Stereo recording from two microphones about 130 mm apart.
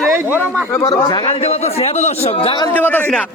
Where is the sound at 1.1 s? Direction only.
40° left (ahead or behind).